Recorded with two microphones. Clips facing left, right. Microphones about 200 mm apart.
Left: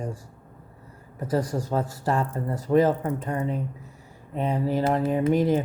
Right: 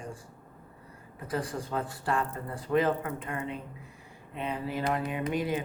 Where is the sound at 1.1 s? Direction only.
40° left (ahead or behind).